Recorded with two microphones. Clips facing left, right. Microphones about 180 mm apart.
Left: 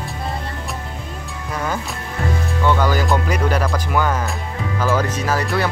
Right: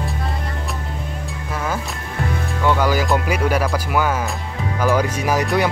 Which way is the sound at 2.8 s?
10° right (ahead or behind).